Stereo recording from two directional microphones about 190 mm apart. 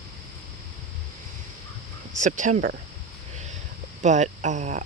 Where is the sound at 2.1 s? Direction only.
40° right (ahead or behind).